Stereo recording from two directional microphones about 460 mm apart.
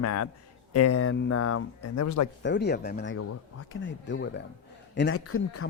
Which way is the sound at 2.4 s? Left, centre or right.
Left.